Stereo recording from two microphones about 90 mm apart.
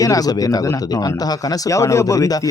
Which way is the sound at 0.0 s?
40° left (ahead or behind).